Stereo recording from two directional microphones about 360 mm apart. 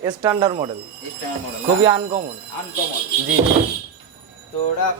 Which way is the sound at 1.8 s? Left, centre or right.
Centre.